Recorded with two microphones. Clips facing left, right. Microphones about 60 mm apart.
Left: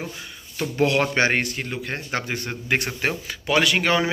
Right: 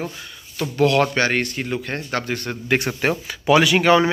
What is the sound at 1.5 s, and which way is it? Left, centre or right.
A man's voice, centre.